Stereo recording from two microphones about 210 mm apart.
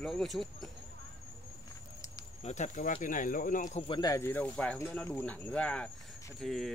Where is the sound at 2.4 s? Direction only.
35° left (ahead or behind).